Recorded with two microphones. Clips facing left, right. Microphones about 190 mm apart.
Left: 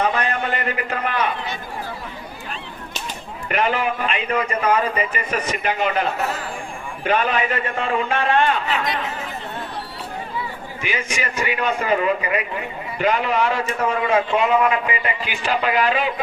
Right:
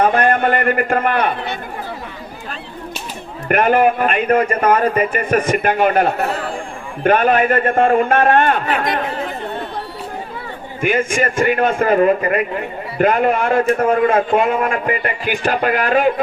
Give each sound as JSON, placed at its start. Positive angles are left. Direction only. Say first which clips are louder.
{"t": 0.0, "sound": "a man's voice", "louder": "right 7 dB", "side_deg": -50}
{"t": 3.5, "sound": "a man's voice", "louder": "right 8 dB", "side_deg": -50}
{"t": 10.8, "sound": "a man's voice", "louder": "right 10 dB", "side_deg": -50}